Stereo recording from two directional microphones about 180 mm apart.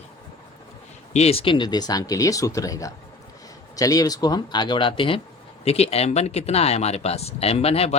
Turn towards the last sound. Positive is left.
turn(degrees=35)  # may be behind; listen again after turning